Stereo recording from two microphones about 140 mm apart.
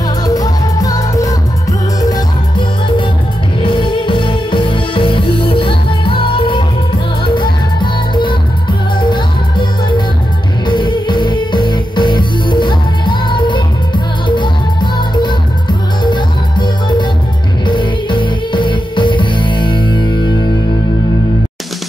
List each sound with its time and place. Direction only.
0.2 s music: 25° left (ahead or behind)
3.6 s music: 35° left (ahead or behind)